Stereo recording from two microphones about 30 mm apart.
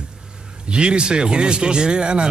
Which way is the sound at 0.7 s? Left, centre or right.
Right.